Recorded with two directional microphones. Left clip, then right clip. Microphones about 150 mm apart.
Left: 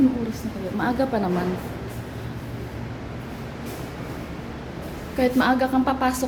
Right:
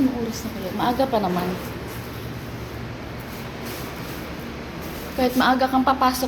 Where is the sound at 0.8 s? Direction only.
20° left (ahead or behind).